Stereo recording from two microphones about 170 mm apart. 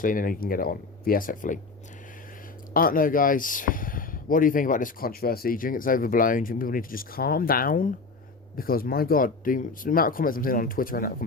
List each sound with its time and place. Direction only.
0.0 s speech: 55° left (ahead or behind)
2.7 s speech: 55° left (ahead or behind)